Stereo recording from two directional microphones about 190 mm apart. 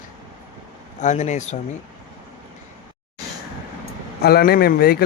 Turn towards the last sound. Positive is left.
turn(degrees=50)  # may be behind; listen again after turning